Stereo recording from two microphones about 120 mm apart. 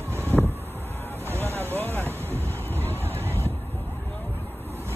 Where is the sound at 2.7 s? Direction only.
15° left (ahead or behind).